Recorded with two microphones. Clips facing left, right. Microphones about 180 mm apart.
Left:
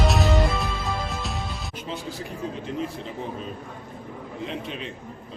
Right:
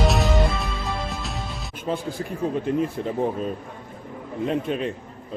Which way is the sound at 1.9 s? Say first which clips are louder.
Right 8 dB; 50° right (ahead or behind).